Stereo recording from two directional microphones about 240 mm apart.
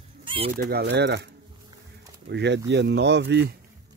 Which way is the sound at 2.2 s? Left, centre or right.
Right.